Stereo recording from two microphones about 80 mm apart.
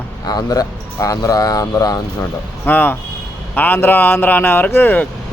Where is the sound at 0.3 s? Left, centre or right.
Left.